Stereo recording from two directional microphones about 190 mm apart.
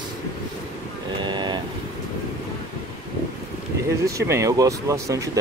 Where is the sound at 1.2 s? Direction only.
25° right (ahead or behind).